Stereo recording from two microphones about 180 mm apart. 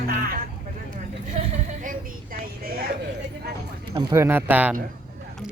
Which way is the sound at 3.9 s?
20° right (ahead or behind).